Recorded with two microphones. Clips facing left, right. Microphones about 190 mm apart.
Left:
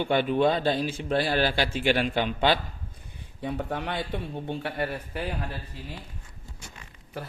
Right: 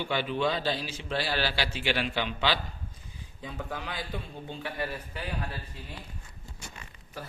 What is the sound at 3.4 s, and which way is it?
A man's voice, 65° left (ahead or behind).